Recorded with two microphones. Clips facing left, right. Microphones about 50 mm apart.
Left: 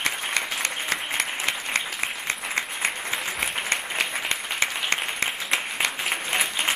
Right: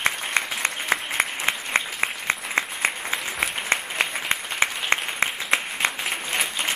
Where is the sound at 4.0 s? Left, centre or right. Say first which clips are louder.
Right 2 dB; right.